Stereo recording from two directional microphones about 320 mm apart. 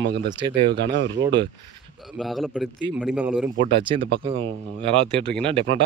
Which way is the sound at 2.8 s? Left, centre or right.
Centre.